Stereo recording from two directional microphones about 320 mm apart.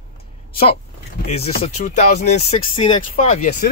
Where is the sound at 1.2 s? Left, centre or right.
Centre.